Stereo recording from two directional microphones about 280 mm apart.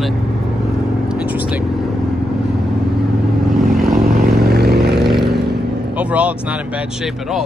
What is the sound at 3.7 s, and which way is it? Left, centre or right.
Vehicle, centre.